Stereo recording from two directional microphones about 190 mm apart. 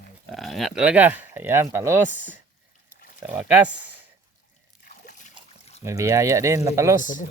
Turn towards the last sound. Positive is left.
turn(degrees=45)  # may be behind; listen again after turning